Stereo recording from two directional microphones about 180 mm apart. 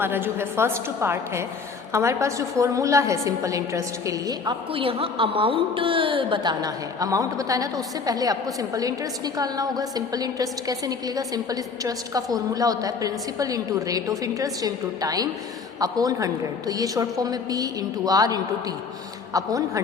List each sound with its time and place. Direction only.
0.0 s a woman's voice: 10° right (ahead or behind)